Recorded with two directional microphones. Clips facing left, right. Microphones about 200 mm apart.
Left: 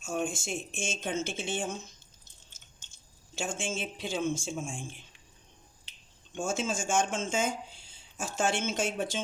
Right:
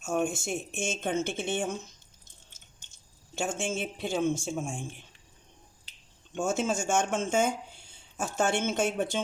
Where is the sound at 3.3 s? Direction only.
60° right (ahead or behind).